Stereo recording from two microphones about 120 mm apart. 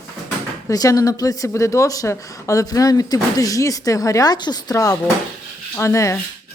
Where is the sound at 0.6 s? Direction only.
30° left (ahead or behind).